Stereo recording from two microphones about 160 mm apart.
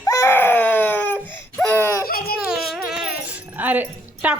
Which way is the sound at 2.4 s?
5° right (ahead or behind).